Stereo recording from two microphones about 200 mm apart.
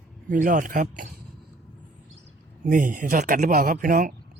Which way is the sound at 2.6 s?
40° right (ahead or behind).